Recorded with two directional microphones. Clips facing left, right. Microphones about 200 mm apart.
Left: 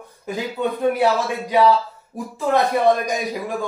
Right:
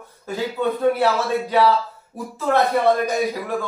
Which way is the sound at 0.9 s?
15° left (ahead or behind).